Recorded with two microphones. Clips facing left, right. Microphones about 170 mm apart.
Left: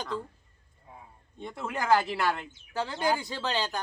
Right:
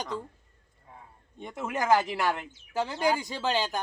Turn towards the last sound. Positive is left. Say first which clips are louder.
# right 2 dB
turn(degrees=-15)  # may be behind; listen again after turning